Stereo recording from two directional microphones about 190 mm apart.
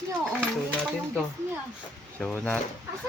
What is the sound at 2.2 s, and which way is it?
Speech, 5° left (ahead or behind).